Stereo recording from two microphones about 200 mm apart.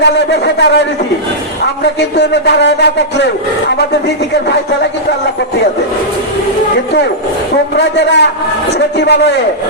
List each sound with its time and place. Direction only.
0.0 s a man's voice: 60° left (ahead or behind)
1.8 s a man's voice: 60° left (ahead or behind)
7.8 s a man's voice: 60° left (ahead or behind)